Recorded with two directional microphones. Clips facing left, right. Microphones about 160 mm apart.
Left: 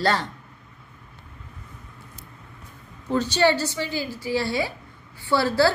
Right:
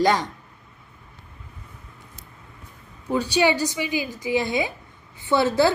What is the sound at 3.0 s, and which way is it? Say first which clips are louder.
A woman's voice: even; 10° right (ahead or behind).